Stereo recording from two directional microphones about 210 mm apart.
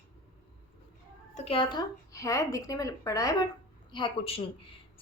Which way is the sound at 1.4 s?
25° left (ahead or behind).